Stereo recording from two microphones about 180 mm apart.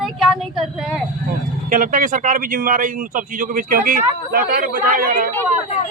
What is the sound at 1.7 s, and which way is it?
A man's voice, 50° right (ahead or behind).